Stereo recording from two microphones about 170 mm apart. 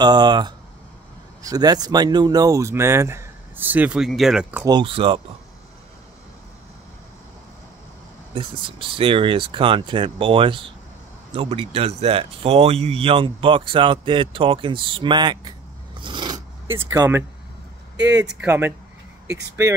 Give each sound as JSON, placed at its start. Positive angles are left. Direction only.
{"t": 0.0, "sound": "speech", "side_deg": -25}
{"t": 4.6, "sound": "speech", "side_deg": -30}
{"t": 8.4, "sound": "speech", "side_deg": -30}
{"t": 16.0, "sound": "a sound", "side_deg": -30}
{"t": 16.6, "sound": "speech", "side_deg": -15}
{"t": 18.2, "sound": "speech", "side_deg": -5}